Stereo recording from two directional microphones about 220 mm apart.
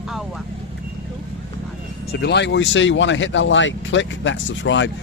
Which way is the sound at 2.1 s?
50° left (ahead or behind).